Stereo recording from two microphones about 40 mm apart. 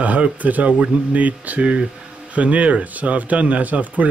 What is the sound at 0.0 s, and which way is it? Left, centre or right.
Speech, right.